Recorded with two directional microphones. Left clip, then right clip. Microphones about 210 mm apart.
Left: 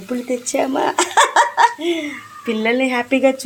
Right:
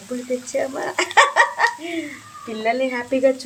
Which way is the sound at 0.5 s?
20° left (ahead or behind).